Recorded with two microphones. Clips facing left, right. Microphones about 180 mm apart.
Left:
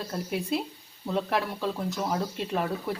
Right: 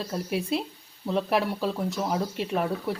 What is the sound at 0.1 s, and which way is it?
Speech, 5° right (ahead or behind).